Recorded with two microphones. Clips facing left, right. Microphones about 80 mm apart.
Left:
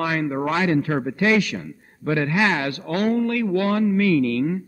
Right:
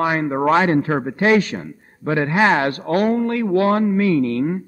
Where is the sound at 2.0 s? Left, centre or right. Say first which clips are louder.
Right 3 dB; right.